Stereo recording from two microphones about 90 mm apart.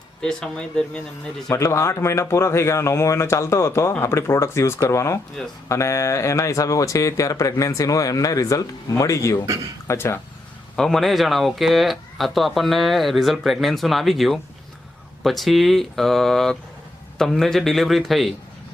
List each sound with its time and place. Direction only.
0.2 s speech: 5° left (ahead or behind)
1.5 s speech: 35° left (ahead or behind)
10.8 s speech: 5° left (ahead or behind)